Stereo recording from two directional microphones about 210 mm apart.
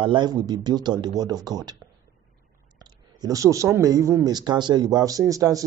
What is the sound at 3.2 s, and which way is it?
Speech, 15° right (ahead or behind).